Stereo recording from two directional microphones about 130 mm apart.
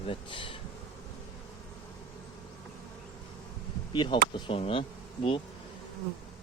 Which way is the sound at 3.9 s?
35° left (ahead or behind).